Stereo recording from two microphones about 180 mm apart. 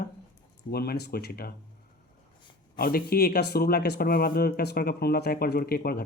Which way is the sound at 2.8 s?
55° left (ahead or behind).